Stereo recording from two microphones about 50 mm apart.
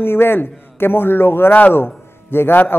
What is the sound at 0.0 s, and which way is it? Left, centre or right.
A man's voice, left.